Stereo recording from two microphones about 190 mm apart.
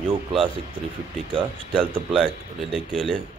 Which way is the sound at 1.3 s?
30° right (ahead or behind).